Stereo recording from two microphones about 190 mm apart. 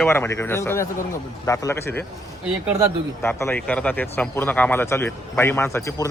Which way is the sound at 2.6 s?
15° right (ahead or behind).